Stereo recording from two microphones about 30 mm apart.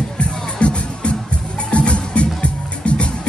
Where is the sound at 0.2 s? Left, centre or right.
Left.